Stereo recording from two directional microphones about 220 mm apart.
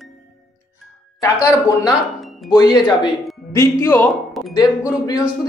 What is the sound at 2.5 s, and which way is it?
Speech, 20° left (ahead or behind).